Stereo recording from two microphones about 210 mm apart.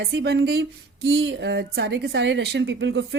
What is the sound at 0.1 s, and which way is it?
A woman's voice, 55° right (ahead or behind).